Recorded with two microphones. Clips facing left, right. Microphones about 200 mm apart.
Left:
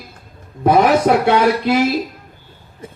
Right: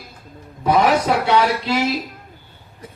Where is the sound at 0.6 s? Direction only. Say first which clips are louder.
Left 4 dB; 50° left (ahead or behind).